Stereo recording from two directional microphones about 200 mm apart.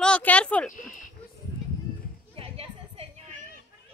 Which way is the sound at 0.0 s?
5° left (ahead or behind).